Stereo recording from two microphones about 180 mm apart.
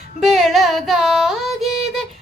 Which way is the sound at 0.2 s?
Centre (ahead or behind).